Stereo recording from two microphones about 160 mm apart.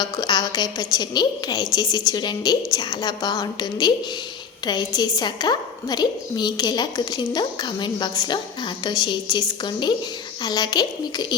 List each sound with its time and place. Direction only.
0.0 s a woman's voice: 25° left (ahead or behind)
10.4 s a woman's voice: 25° left (ahead or behind)